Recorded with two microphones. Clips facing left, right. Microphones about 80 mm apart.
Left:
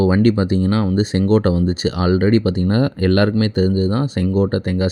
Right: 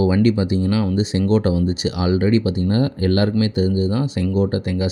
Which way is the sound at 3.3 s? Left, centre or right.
Left.